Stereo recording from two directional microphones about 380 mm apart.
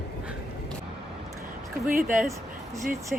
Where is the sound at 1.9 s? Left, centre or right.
Right.